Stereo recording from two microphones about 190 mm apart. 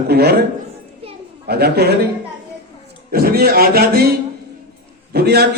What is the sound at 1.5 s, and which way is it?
Speech, 55° right (ahead or behind).